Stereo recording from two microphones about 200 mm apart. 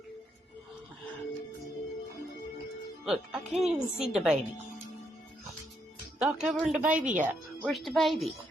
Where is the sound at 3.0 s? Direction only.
5° right (ahead or behind).